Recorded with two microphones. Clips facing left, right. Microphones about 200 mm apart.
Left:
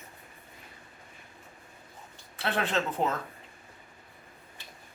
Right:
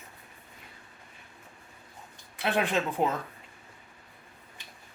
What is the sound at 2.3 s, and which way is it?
Speech, 15° right (ahead or behind).